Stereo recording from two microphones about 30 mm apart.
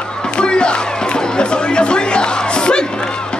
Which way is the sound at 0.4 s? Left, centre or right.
Left.